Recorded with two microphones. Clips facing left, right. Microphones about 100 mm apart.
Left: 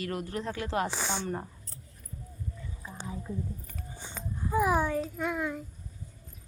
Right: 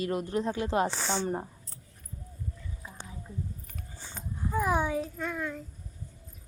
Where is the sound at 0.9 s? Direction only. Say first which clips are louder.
Right 2 dB; 10° left (ahead or behind).